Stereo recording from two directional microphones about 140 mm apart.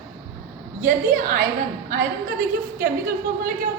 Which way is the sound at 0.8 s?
75° right (ahead or behind).